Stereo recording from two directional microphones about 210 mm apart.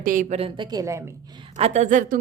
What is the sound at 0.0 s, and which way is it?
A woman's voice, 40° right (ahead or behind).